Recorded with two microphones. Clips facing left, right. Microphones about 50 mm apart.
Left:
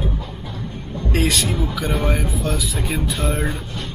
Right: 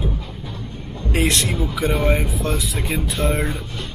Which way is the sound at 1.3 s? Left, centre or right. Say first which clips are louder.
Even; centre.